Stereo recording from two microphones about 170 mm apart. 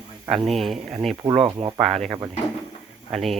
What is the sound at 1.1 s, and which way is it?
Speech, 25° right (ahead or behind).